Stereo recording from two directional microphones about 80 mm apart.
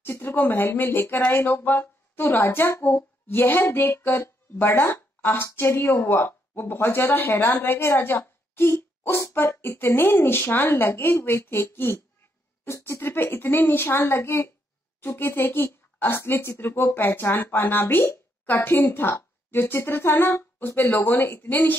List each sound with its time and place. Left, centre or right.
0.0 s a woman's voice: left